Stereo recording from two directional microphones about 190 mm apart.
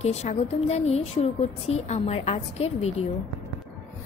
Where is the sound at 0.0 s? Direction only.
35° left (ahead or behind).